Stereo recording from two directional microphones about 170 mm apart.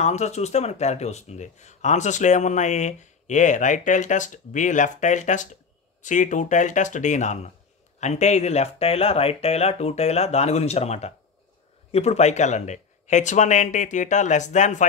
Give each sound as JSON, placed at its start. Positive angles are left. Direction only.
{"t": 0.0, "sound": "speech", "side_deg": 40}